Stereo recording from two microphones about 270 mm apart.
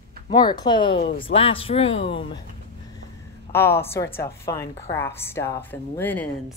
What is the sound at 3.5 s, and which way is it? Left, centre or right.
A woman's voice, centre.